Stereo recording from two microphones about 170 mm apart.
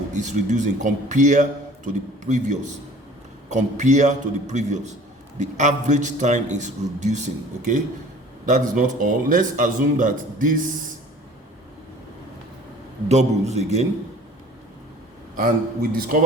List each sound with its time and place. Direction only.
0.1 s a man's voice: 45° right (ahead or behind)
8.4 s a man's voice: 50° right (ahead or behind)
13.1 s a man's voice: 40° right (ahead or behind)
15.4 s a man's voice: 55° right (ahead or behind)